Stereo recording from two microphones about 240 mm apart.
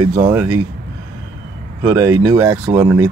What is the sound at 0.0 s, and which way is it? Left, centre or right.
Speech, centre.